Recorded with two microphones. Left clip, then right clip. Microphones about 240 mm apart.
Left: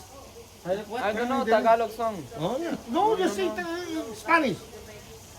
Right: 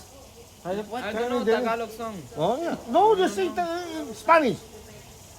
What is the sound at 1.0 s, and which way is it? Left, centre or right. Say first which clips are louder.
A man's voice: even; centre.